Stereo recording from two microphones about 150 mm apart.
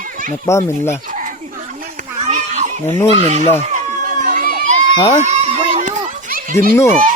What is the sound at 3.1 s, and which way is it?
Speech, 45° right (ahead or behind).